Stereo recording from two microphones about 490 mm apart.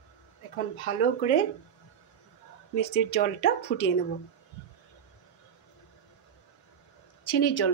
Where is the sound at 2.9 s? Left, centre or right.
Centre.